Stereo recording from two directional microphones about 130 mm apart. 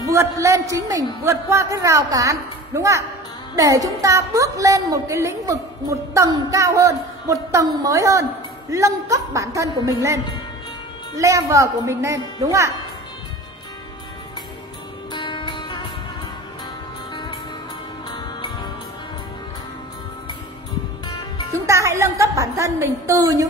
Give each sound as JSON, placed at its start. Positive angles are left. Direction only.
{"t": 0.0, "sound": "a woman's voice", "side_deg": -20}
{"t": 11.1, "sound": "a woman's voice", "side_deg": -25}
{"t": 15.1, "sound": "music", "side_deg": 35}
{"t": 17.1, "sound": "music", "side_deg": 35}
{"t": 21.5, "sound": "a woman's voice", "side_deg": -25}